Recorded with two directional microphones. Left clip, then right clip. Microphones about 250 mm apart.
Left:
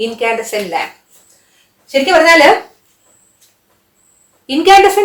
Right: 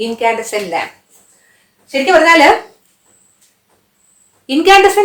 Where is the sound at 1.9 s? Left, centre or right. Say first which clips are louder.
Left 1 dB; centre.